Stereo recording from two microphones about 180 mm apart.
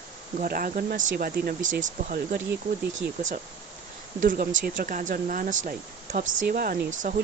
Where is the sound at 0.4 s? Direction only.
50° right (ahead or behind).